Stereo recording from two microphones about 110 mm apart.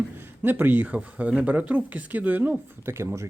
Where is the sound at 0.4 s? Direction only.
15° right (ahead or behind).